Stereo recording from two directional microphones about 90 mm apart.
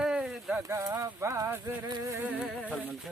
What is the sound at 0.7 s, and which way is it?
Speech, 30° right (ahead or behind).